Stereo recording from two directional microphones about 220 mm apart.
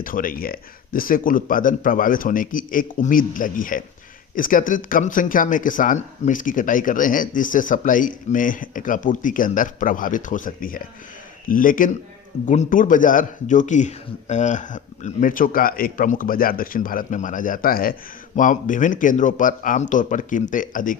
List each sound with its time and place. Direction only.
0.0 s speech: 40° left (ahead or behind)